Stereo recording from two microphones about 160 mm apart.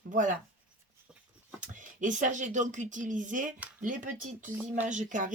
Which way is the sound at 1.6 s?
50° right (ahead or behind).